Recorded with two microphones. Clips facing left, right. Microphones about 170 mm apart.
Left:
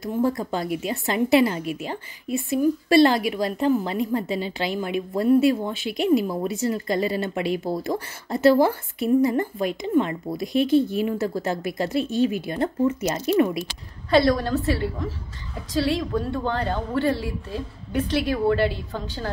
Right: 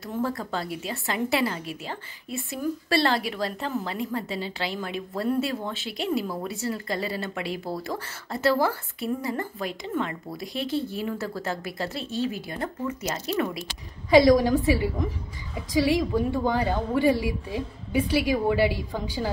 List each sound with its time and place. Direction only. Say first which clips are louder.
0.0 s a woman's voice: left 6 dB; 15° left (ahead or behind)
14.1 s a woman's voice: right 2 dB; 10° right (ahead or behind)